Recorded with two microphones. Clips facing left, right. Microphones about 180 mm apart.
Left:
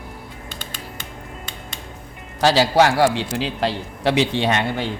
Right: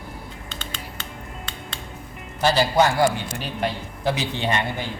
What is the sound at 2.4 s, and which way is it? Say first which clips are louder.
A man's voice: left 3 dB; 90° left.